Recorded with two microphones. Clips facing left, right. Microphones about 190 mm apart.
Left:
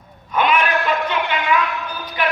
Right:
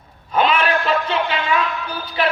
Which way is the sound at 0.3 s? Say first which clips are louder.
Right 1 dB; 30° right (ahead or behind).